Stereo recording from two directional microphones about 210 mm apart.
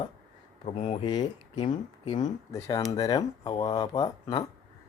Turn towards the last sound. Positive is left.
turn(degrees=20)  # may be behind; listen again after turning